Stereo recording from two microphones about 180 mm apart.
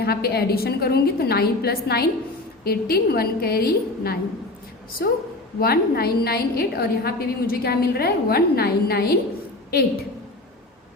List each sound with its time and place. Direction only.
0.0 s a woman's voice: 60° left (ahead or behind)